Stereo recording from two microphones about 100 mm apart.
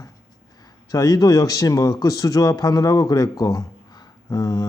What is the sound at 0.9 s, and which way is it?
Speech, 35° left (ahead or behind).